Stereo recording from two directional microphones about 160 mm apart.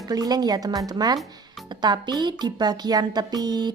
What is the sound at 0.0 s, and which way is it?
Speech, 25° right (ahead or behind).